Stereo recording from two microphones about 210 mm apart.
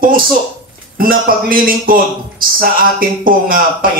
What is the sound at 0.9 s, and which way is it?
A man's voice, 40° right (ahead or behind).